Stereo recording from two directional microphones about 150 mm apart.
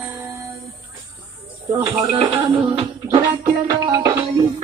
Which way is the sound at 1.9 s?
30° right (ahead or behind).